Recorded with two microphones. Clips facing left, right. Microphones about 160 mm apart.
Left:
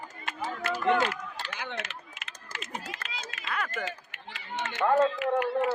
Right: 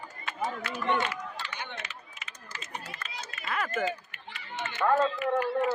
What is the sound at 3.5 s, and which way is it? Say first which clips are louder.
Speech: right 3 dB; centre (ahead or behind).